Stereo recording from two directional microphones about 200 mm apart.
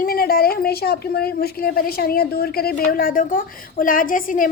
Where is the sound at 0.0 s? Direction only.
45° left (ahead or behind).